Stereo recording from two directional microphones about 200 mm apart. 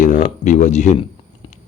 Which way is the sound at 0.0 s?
40° left (ahead or behind).